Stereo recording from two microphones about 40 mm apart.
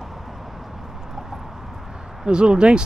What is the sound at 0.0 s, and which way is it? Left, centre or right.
Vehicle, centre.